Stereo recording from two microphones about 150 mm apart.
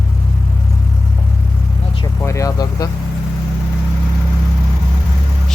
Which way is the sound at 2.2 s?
20° left (ahead or behind).